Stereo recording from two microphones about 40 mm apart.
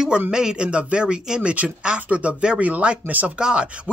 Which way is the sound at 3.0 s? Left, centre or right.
Right.